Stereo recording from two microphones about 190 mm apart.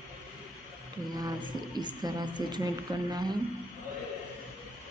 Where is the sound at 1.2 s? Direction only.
20° right (ahead or behind).